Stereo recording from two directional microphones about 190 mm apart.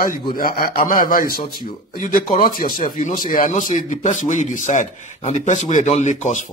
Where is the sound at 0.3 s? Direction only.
50° left (ahead or behind).